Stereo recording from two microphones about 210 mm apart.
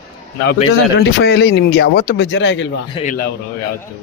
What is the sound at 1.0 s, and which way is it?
Speech, 50° left (ahead or behind).